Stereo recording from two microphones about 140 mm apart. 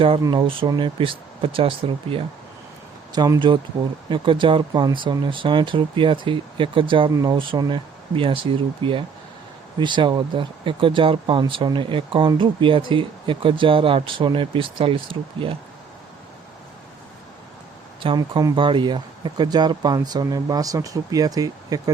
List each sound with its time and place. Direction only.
0.3 s speech: 35° right (ahead or behind)
7.1 s speech: 25° right (ahead or behind)
7.3 s speech: 35° right (ahead or behind)
18.2 s speech: 25° right (ahead or behind)